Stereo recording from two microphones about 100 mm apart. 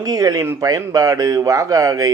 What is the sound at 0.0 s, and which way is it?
Speech, 40° right (ahead or behind).